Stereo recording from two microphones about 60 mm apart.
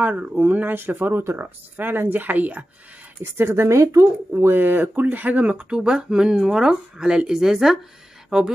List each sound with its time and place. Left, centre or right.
0.0 s speech: right
3.3 s speech: right
4.5 s speech: right; by 8.5 s centre